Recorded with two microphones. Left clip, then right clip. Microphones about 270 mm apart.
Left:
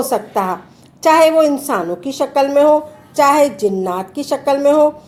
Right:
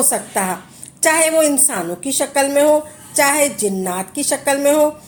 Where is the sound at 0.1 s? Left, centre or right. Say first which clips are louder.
Left 3 dB; right.